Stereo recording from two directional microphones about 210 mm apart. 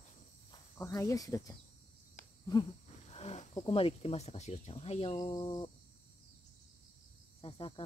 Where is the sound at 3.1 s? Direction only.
30° left (ahead or behind).